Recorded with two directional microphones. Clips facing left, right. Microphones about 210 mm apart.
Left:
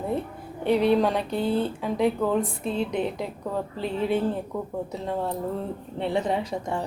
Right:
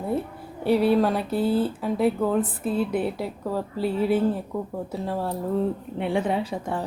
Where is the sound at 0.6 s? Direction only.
5° right (ahead or behind).